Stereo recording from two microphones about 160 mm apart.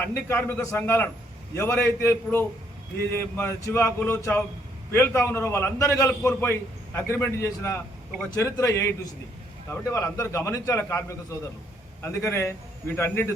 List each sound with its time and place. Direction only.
0.0 s a man's voice: 15° left (ahead or behind)